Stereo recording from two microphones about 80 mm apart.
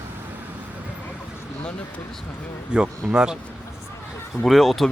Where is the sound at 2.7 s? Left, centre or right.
Centre.